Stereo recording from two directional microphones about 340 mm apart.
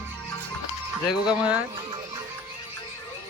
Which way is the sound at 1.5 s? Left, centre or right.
Centre.